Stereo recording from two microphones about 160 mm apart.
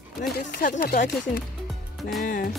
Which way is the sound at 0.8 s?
70° left (ahead or behind).